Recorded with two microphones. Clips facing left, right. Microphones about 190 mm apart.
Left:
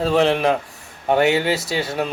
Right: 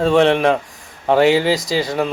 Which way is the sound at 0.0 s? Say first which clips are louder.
Right 4 dB; 5° left (ahead or behind).